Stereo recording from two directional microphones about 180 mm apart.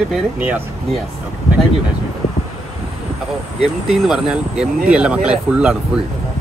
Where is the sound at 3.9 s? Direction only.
Centre (ahead or behind).